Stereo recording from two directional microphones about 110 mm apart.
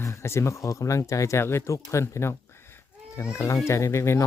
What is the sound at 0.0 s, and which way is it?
Speech, 25° left (ahead or behind).